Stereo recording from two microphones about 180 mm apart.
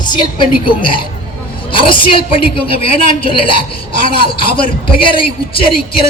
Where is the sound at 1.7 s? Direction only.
30° left (ahead or behind).